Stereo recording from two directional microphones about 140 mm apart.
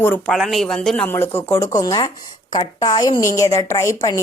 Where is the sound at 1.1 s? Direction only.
15° left (ahead or behind).